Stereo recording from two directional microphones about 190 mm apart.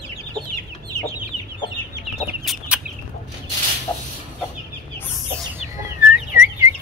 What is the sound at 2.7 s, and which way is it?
Chicken, 5° right (ahead or behind).